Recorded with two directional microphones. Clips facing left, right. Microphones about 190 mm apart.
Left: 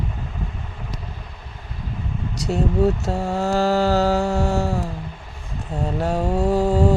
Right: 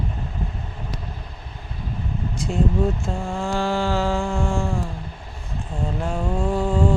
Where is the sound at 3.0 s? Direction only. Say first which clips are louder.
Left 4 dB; 70° left (ahead or behind).